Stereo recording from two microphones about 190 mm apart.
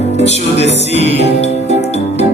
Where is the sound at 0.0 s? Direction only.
35° left (ahead or behind).